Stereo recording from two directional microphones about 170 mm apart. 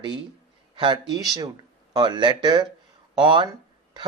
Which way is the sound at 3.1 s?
25° right (ahead or behind).